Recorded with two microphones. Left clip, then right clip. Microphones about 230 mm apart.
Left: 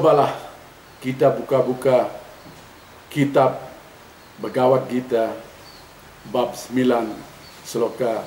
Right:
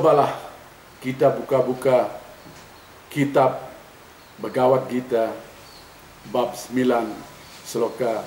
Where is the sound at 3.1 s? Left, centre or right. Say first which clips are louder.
Left 1 dB; centre.